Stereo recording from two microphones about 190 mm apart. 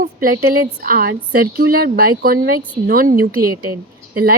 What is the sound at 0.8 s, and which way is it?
A woman's voice, 50° right (ahead or behind).